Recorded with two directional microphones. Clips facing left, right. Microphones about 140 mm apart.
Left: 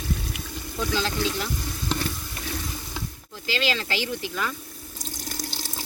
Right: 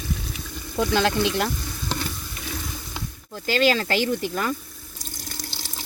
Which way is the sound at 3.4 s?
50° right (ahead or behind).